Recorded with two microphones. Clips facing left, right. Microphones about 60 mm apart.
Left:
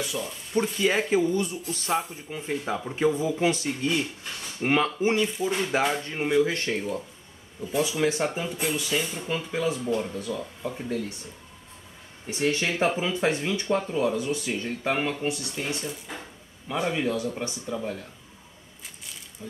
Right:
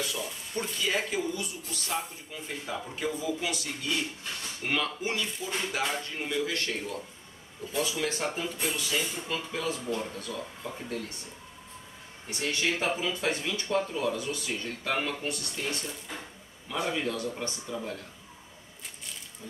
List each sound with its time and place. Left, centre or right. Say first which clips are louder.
0.0 s speech: left 3 dB; centre
0.8 s speech: left 6 dB; left
5.4 s speech: left 7 dB; centre
5.7 s speech: left 6 dB; left; by 10.8 s centre
12.3 s speech: left 4 dB; left